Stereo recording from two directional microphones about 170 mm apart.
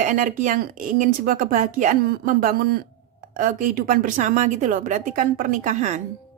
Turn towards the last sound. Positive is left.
turn(degrees=-45)  # may be behind; listen again after turning